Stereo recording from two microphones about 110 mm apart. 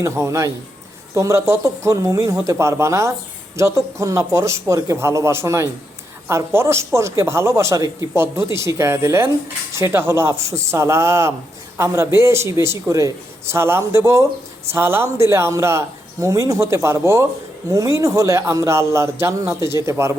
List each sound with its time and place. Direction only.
0.0 s speech: 25° right (ahead or behind)